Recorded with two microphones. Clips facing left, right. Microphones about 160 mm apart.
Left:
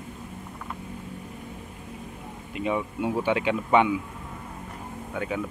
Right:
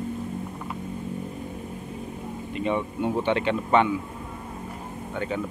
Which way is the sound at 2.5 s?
5° left (ahead or behind).